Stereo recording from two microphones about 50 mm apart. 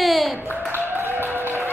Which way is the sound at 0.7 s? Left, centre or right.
Right.